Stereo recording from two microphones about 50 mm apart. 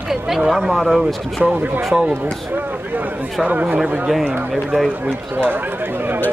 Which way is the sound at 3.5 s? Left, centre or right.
Right.